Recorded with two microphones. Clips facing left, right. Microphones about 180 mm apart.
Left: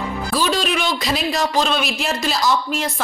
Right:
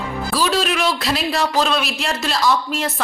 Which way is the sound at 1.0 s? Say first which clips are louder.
Even; centre (ahead or behind).